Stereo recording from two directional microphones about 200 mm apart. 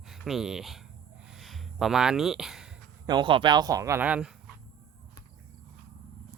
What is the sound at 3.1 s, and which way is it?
Speech, 25° right (ahead or behind).